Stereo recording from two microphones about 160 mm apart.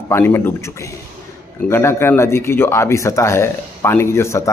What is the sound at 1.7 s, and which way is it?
Speech, 15° left (ahead or behind).